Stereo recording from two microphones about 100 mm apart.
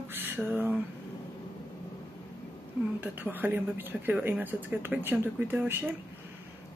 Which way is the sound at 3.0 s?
20° right (ahead or behind).